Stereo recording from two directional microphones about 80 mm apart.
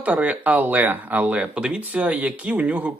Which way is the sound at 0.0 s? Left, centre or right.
Centre.